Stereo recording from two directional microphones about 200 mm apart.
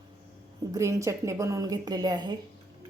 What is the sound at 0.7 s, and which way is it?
A woman's voice, 15° right (ahead or behind).